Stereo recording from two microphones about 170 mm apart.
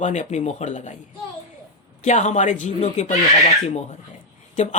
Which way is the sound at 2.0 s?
45° left (ahead or behind).